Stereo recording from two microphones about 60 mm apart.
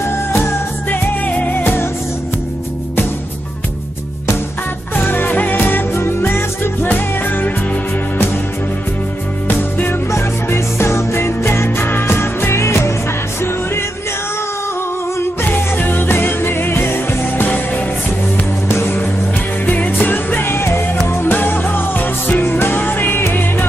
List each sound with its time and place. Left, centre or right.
0.0 s music: left
4.9 s music: left
6.9 s music: left
9.6 s music: left
10.1 s music: left
15.1 s music: left
17.4 s music: left
19.6 s music: left